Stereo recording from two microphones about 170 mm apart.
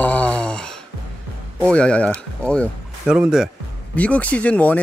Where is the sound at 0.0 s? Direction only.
10° left (ahead or behind).